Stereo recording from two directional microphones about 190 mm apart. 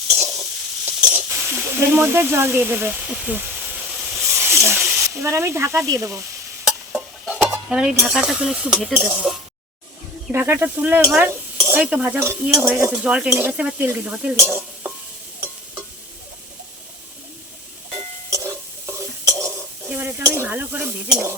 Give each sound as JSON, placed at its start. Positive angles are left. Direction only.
{"t": 0.9, "sound": "speech", "side_deg": -10}
{"t": 4.3, "sound": "snake", "side_deg": -10}
{"t": 4.8, "sound": "hiss", "side_deg": -5}
{"t": 5.0, "sound": "stir", "side_deg": -15}
{"t": 6.9, "sound": "music", "side_deg": 0}
{"t": 7.4, "sound": "speech", "side_deg": -5}
{"t": 10.3, "sound": "stir", "side_deg": -10}
{"t": 18.3, "sound": "stir", "side_deg": -15}